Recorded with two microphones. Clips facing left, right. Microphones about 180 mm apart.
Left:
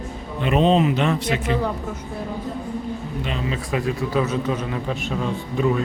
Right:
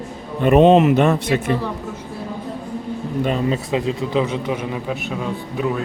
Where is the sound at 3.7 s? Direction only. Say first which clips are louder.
Right 2 dB; 20° right (ahead or behind); by 5.8 s centre (ahead or behind).